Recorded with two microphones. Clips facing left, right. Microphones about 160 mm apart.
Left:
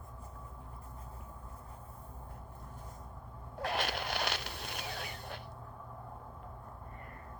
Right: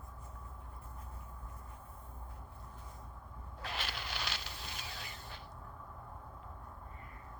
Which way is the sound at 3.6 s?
55° left (ahead or behind).